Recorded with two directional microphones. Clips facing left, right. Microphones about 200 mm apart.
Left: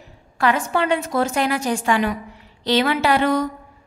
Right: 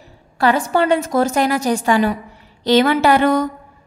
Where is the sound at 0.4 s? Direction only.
35° right (ahead or behind).